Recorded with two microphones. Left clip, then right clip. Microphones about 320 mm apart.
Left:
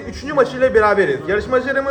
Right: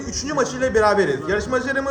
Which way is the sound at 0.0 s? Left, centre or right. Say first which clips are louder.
Left 5 dB; centre.